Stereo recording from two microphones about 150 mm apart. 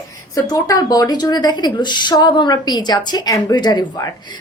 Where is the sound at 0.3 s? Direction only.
25° left (ahead or behind).